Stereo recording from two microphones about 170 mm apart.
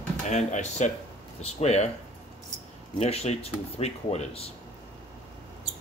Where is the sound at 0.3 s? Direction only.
45° left (ahead or behind).